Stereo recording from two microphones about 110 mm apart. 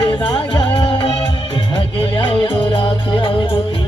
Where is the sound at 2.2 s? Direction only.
55° left (ahead or behind).